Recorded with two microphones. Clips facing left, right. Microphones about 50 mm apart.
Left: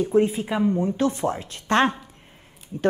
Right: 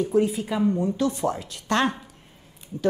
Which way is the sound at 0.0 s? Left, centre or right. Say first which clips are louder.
Left 2 dB; left.